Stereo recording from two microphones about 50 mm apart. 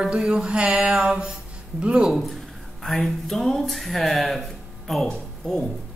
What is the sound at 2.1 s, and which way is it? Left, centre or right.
Speech, centre.